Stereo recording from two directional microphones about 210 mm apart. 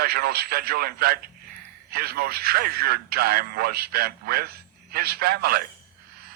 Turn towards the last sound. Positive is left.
turn(degrees=-45)  # may be behind; listen again after turning